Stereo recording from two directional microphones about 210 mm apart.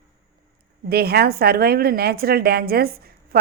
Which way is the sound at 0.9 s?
50° right (ahead or behind).